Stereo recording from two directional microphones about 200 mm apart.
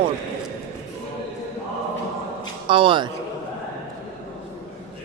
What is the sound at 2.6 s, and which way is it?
Speech, 25° right (ahead or behind).